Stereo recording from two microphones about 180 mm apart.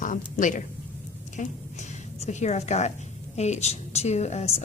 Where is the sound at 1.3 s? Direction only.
40° left (ahead or behind).